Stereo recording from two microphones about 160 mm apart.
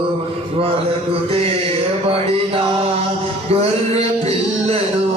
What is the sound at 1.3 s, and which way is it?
Mantra, 35° right (ahead or behind).